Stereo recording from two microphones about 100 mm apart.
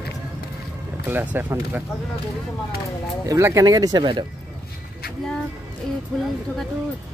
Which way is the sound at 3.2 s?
30° right (ahead or behind).